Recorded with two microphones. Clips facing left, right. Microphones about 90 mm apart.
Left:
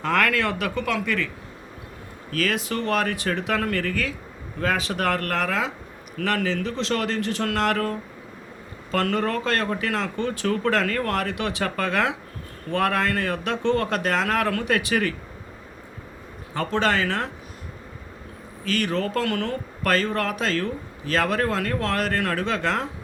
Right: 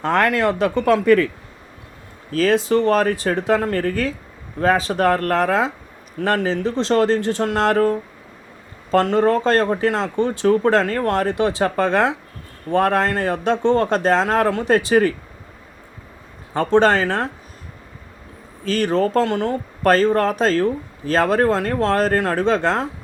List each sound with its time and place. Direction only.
0.0 s speech: 30° right (ahead or behind)
2.3 s speech: 30° right (ahead or behind)
16.6 s speech: 35° right (ahead or behind)
18.6 s speech: 35° right (ahead or behind)